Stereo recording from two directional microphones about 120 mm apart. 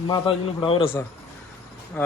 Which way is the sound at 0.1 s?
45° left (ahead or behind).